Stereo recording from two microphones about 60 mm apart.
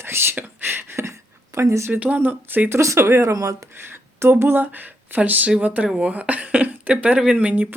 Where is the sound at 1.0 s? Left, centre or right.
Right.